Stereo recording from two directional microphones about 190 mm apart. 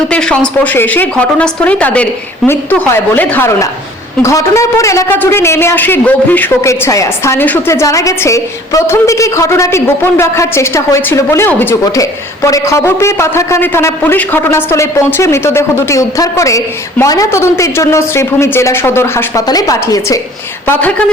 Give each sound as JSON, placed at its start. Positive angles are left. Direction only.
{"t": 0.1, "sound": "a man's voice", "side_deg": 5}